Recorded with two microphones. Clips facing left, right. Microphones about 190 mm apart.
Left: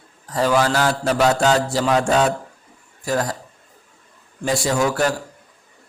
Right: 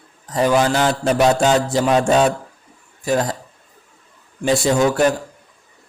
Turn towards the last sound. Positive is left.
turn(degrees=-20)  # may be behind; listen again after turning